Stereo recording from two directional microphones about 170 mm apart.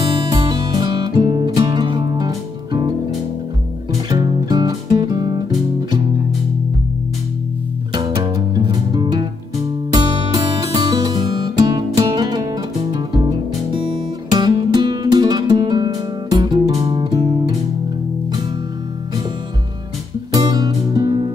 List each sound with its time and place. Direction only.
0.1 s music: 25° right (ahead or behind)
4.1 s music: 25° right (ahead or behind)
7.9 s music: 25° right (ahead or behind)
20.4 s music: 20° right (ahead or behind)